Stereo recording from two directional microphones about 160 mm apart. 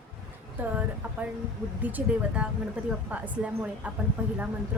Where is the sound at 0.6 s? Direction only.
10° right (ahead or behind).